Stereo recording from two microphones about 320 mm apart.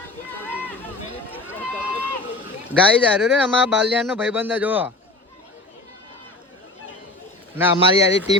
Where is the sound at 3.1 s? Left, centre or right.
Centre.